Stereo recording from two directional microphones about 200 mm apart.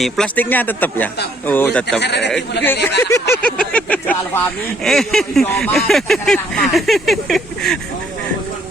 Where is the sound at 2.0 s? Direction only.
55° left (ahead or behind).